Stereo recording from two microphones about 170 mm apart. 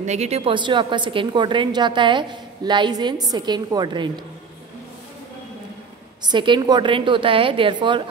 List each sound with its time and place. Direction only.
0.0 s a woman's voice: 40° right (ahead or behind); by 4.1 s 25° right (ahead or behind)
6.2 s a woman's voice: 25° right (ahead or behind)